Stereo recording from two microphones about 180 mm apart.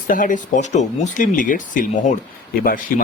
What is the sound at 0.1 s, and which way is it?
Speech, 45° left (ahead or behind).